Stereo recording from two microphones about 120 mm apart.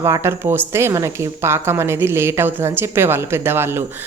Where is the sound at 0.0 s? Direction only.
25° right (ahead or behind).